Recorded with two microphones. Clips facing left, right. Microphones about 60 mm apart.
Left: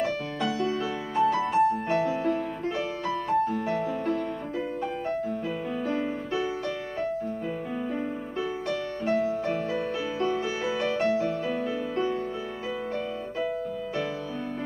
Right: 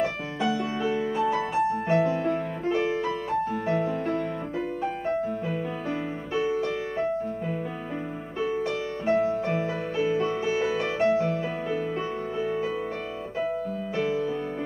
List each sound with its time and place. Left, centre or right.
0.0 s music: centre
2.6 s music: right
3.3 s music: centre
9.0 s music: centre
10.0 s music: centre
10.8 s music: centre